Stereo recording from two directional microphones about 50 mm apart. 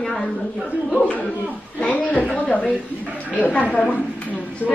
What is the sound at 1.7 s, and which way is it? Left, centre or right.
A woman's voice, left.